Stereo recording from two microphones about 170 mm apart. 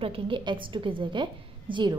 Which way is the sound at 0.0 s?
30° right (ahead or behind).